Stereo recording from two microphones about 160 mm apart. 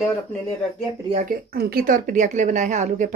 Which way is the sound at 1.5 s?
70° right (ahead or behind).